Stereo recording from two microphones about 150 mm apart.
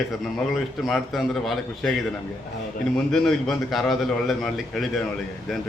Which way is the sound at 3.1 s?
Centre (ahead or behind).